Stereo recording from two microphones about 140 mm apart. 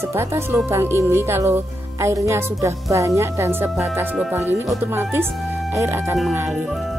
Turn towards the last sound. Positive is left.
turn(degrees=-20)  # may be behind; listen again after turning